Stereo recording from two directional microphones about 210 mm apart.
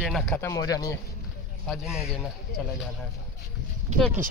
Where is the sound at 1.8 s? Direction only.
5° right (ahead or behind).